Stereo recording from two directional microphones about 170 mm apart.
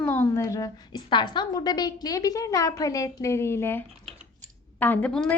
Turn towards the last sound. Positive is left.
turn(degrees=5)  # may be behind; listen again after turning